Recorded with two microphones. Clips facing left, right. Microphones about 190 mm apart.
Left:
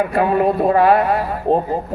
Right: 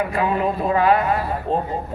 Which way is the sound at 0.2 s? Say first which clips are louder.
Left 7 dB; 50° left (ahead or behind).